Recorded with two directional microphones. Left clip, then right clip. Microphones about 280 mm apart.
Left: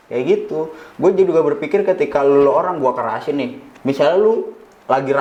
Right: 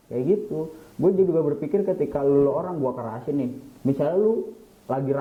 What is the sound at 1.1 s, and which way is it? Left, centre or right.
Speech, centre.